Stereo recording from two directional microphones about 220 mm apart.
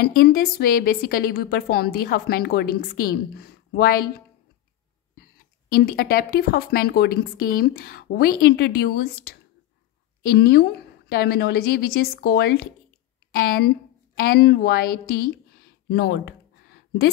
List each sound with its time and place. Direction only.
0.0 s a woman's voice: 45° left (ahead or behind)
5.7 s a woman's voice: 45° left (ahead or behind)
15.9 s a sound: 50° left (ahead or behind)